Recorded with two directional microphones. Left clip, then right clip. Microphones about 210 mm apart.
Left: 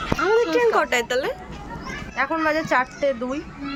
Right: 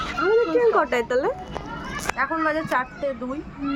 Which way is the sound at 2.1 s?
15° left (ahead or behind).